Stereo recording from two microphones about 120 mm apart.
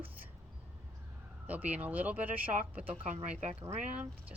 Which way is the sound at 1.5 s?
15° right (ahead or behind).